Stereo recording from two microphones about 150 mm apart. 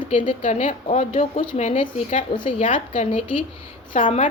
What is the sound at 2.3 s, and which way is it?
A woman's voice, 35° left (ahead or behind).